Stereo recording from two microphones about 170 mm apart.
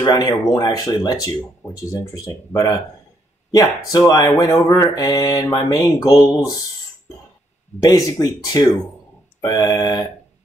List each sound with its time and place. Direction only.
0.0 s speech: 25° left (ahead or behind)
7.8 s speech: 20° left (ahead or behind)